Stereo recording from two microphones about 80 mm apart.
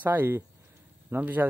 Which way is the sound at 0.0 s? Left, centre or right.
Right.